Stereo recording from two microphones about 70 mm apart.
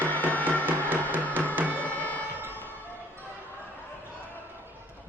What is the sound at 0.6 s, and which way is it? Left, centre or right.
Music, right.